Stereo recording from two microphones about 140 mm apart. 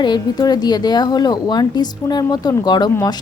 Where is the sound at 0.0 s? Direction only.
30° left (ahead or behind).